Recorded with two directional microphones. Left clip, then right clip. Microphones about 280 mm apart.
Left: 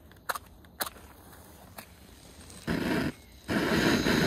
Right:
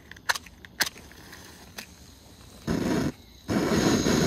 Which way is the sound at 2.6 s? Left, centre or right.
Right.